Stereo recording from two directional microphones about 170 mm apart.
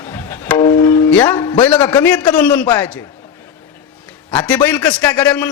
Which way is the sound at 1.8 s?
25° left (ahead or behind).